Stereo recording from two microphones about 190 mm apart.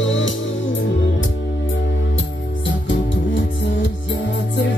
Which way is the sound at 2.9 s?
75° left (ahead or behind).